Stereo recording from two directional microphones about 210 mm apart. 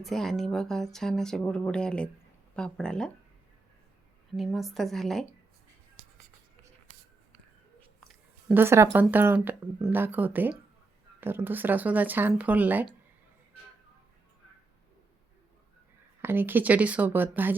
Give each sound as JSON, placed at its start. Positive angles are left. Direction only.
{"t": 0.0, "sound": "speech", "side_deg": 0}
{"t": 4.4, "sound": "speech", "side_deg": 0}
{"t": 8.0, "sound": "a sound", "side_deg": 0}
{"t": 8.6, "sound": "speech", "side_deg": -10}
{"t": 16.2, "sound": "speech", "side_deg": -10}